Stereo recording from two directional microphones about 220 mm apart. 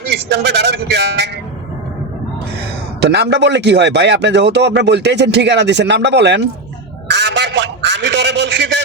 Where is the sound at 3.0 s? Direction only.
50° right (ahead or behind).